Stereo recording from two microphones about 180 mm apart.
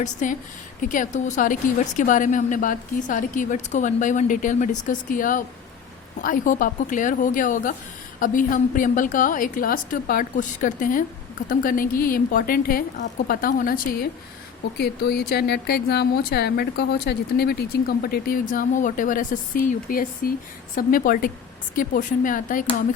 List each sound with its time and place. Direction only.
0.0 s a woman's voice: 45° left (ahead or behind)
14.8 s a woman's voice: 65° left (ahead or behind); by 23.0 s 50° left (ahead or behind)